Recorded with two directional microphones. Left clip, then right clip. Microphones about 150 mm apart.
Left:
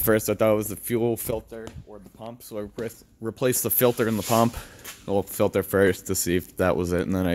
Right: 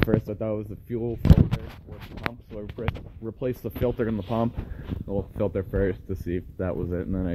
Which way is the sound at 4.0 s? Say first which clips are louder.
Left 3 dB; 25° left (ahead or behind).